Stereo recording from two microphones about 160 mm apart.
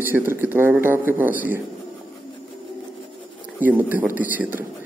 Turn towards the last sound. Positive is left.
turn(degrees=-10)  # may be behind; listen again after turning